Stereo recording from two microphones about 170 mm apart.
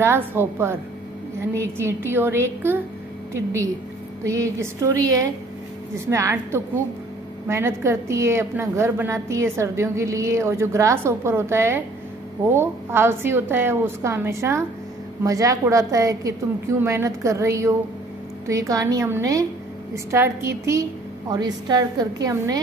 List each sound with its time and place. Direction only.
0.0 s a woman's voice: 15° right (ahead or behind)